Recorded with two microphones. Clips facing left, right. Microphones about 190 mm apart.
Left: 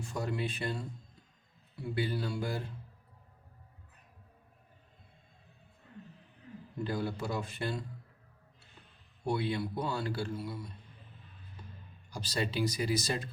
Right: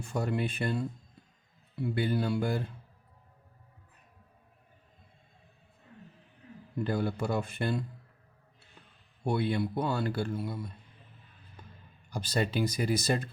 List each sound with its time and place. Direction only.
0.0 s a man's voice: 55° right (ahead or behind)
2.0 s a man's voice: 55° right (ahead or behind)
6.8 s a man's voice: 60° right (ahead or behind)
9.2 s a man's voice: 60° right (ahead or behind)
12.1 s speech: 55° right (ahead or behind)